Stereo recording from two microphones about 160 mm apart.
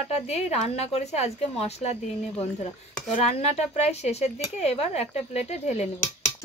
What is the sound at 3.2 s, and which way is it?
Speech, 40° left (ahead or behind).